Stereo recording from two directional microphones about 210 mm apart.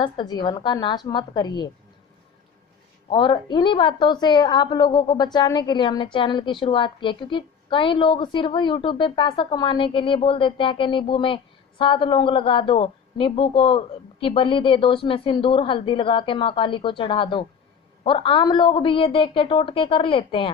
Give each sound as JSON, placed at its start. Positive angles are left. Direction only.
{"t": 0.0, "sound": "a woman's voice", "side_deg": 20}
{"t": 3.1, "sound": "a woman's voice", "side_deg": 20}